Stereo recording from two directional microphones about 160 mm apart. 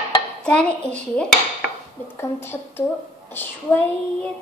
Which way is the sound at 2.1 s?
15° left (ahead or behind).